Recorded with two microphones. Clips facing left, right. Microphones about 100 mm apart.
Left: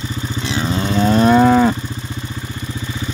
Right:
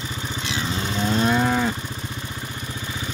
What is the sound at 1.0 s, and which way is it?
Moo, 90° left.